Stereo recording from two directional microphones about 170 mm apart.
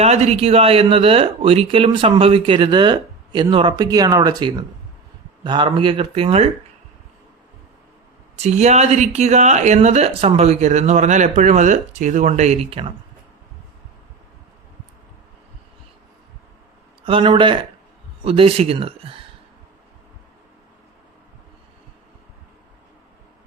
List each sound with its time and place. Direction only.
0.0 s speech: 40° right (ahead or behind)
8.4 s speech: 40° right (ahead or behind)
17.1 s speech: 30° right (ahead or behind)